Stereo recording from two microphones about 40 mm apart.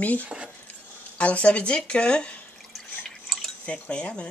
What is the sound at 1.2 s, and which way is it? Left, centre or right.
Speech, left.